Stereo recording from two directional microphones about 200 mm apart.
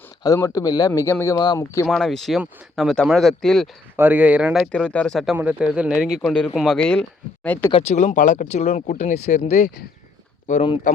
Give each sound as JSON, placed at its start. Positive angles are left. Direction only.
{"t": 0.2, "sound": "speech", "side_deg": 15}
{"t": 1.9, "sound": "speech", "side_deg": 0}
{"t": 3.9, "sound": "speech", "side_deg": -10}
{"t": 7.7, "sound": "speech", "side_deg": 30}